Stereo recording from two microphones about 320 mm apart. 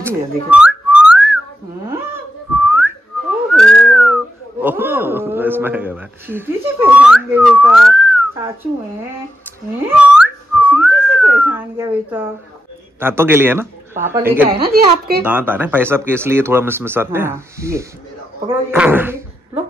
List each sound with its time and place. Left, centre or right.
0.0 s whistling: centre
1.9 s a sound: centre
3.5 s whistling: centre
9.8 s whistling: centre
13.0 s speech: centre
14.7 s speech: right
15.2 s speech: centre